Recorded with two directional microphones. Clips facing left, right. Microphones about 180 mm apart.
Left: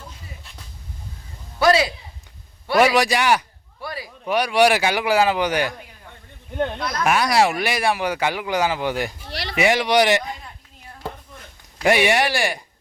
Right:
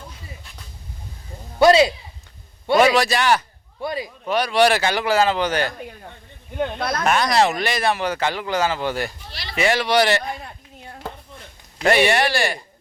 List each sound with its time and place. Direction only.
1.5 s a man's voice: 25° right (ahead or behind)
2.8 s speech: 15° left (ahead or behind)
3.8 s a man's voice: 20° right (ahead or behind)
4.3 s speech: 10° left (ahead or behind)
6.7 s speech: 60° right (ahead or behind)
7.0 s speech: 10° left (ahead or behind)
9.3 s a sound: 65° left (ahead or behind)
9.6 s speech: 15° left (ahead or behind)
11.8 s speech: 15° left (ahead or behind)